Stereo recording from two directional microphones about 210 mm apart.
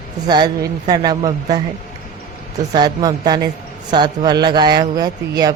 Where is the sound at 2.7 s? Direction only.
20° right (ahead or behind).